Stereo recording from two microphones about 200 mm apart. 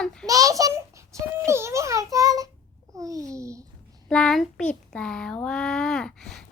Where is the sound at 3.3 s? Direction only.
15° right (ahead or behind).